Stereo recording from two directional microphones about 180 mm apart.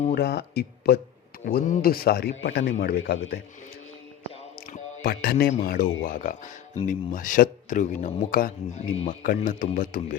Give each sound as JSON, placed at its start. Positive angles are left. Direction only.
{"t": 0.1, "sound": "speech", "side_deg": 65}
{"t": 1.5, "sound": "speech", "side_deg": 50}
{"t": 4.6, "sound": "music", "side_deg": 50}
{"t": 5.6, "sound": "speech", "side_deg": 50}